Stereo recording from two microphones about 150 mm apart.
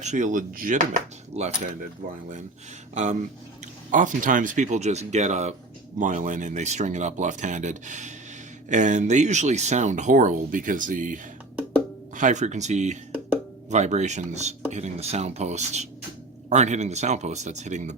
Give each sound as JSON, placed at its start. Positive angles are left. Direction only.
{"t": 0.0, "sound": "speech", "side_deg": -55}
{"t": 2.9, "sound": "speech", "side_deg": -50}